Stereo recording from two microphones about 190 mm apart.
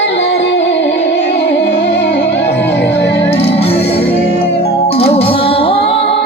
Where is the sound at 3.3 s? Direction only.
30° left (ahead or behind).